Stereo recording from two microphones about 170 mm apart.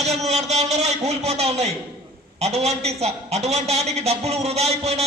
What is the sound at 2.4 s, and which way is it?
A man's voice, 40° right (ahead or behind).